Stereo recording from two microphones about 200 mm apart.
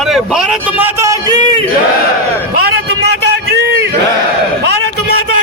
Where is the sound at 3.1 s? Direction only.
55° right (ahead or behind).